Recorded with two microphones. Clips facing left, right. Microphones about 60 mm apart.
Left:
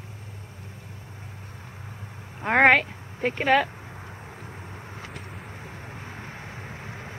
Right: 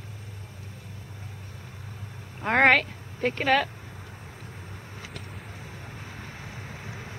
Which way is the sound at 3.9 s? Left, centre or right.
Left.